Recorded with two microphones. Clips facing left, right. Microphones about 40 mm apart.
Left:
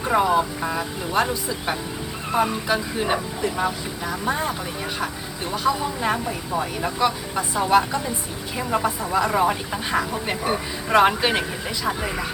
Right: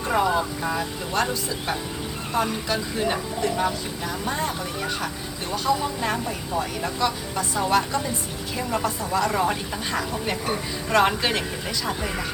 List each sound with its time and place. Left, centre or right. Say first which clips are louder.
0.0 s speech: left 3 dB; centre
5.6 s speech: left 2 dB; centre